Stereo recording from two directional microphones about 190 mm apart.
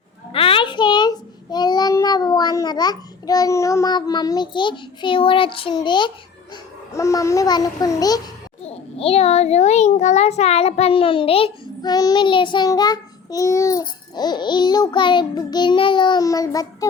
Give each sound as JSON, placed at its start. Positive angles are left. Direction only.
{"t": 0.3, "sound": "child singing", "side_deg": 30}
{"t": 6.9, "sound": "a child's voice", "side_deg": 15}
{"t": 8.6, "sound": "a child's voice", "side_deg": 30}